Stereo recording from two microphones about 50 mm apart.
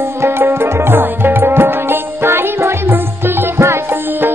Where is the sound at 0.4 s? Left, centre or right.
Right.